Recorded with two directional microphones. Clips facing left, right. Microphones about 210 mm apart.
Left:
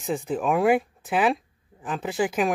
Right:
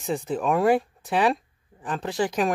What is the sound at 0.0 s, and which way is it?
Speech, centre (ahead or behind).